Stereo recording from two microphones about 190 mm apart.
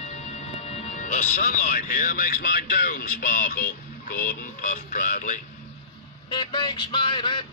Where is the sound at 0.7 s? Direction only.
35° left (ahead or behind).